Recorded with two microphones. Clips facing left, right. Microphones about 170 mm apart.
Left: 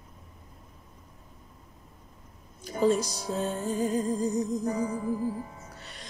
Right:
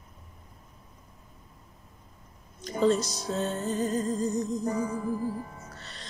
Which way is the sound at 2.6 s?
10° left (ahead or behind).